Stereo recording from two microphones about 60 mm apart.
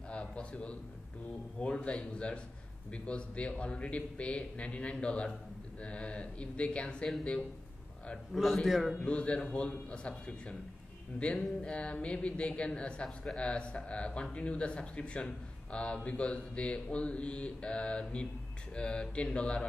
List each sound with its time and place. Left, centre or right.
0.1 s a sound: centre
1.6 s speech: centre
8.3 s speech: centre
9.0 s speech: centre
13.0 s speech: centre
13.4 s speech: centre